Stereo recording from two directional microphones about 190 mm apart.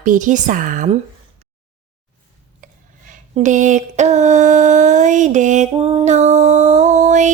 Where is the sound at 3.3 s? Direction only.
40° right (ahead or behind).